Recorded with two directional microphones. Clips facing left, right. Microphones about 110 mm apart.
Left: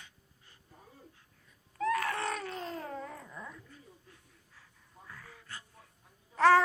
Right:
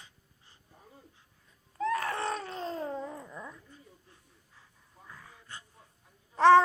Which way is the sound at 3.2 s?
10° right (ahead or behind).